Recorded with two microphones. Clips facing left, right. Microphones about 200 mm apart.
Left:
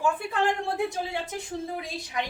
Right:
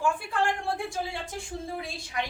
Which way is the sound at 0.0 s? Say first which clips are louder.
Left 2 dB; 20° left (ahead or behind).